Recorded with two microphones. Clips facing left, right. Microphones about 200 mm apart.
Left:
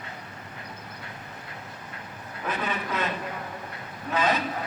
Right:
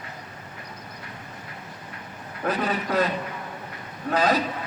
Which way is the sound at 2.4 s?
35° right (ahead or behind).